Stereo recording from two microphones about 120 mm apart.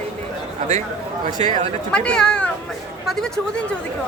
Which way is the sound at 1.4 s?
65° right (ahead or behind).